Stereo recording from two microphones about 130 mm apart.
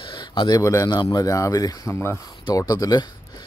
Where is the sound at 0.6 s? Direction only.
25° left (ahead or behind).